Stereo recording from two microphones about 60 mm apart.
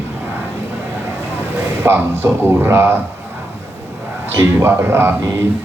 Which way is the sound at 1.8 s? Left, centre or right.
Right.